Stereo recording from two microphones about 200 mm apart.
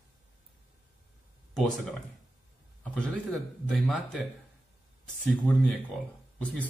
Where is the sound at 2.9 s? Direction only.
5° left (ahead or behind).